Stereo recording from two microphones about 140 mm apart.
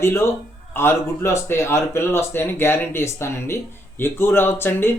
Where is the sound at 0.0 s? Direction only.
20° left (ahead or behind).